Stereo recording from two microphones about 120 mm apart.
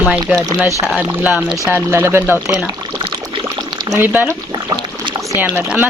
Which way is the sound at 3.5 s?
35° right (ahead or behind).